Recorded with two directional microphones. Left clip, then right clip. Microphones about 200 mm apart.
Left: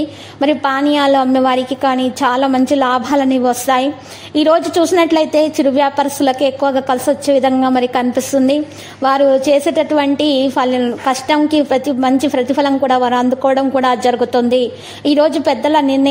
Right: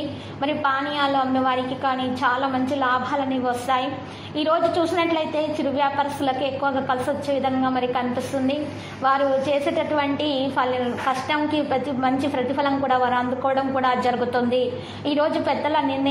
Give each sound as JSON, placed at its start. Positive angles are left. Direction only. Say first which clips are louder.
{"t": 0.4, "sound": "a woman's voice", "louder": "left 8 dB", "side_deg": 45}
{"t": 9.0, "sound": "a woman's voice", "louder": "left 9 dB", "side_deg": 45}